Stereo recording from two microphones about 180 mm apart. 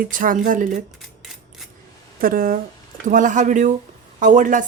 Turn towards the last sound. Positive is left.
turn(degrees=-45)  # may be behind; listen again after turning